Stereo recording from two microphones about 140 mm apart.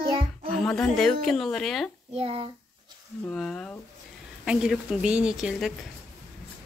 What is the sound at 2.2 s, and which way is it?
Speech, 45° right (ahead or behind).